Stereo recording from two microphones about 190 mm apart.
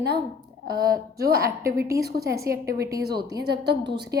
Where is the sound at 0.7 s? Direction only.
50° right (ahead or behind).